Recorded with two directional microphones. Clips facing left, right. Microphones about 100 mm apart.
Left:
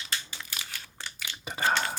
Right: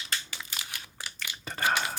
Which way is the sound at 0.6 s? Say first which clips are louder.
Even; 10° right (ahead or behind).